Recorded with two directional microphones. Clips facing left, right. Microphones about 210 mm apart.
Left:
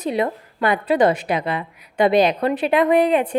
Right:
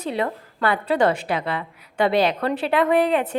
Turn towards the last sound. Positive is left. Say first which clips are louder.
# left 3 dB
turn(degrees=15)  # may be behind; listen again after turning